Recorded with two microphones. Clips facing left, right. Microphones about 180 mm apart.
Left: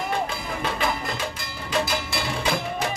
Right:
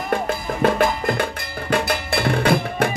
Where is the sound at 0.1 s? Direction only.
60° right (ahead or behind).